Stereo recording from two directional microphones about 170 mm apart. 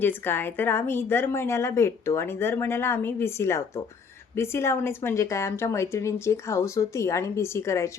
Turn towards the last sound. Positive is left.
turn(degrees=15)  # may be behind; listen again after turning